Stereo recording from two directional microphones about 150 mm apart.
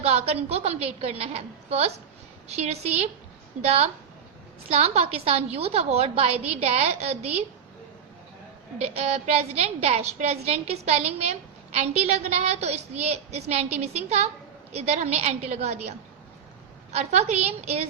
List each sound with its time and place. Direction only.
0.0 s a woman's voice: 45° right (ahead or behind)
8.8 s a woman's voice: 45° right (ahead or behind)